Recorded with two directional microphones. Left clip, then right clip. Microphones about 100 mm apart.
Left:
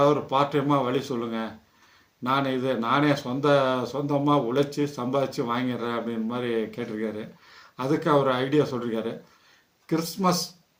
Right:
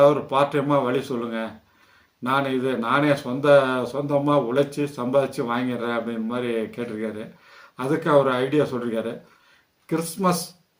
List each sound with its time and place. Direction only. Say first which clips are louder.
0.0 s speech: right 4 dB; 20° left (ahead or behind)